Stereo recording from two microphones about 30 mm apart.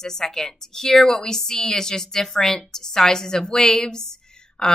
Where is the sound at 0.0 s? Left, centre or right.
Centre.